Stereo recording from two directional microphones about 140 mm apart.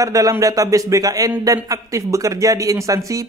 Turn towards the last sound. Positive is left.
turn(degrees=-25)  # may be behind; listen again after turning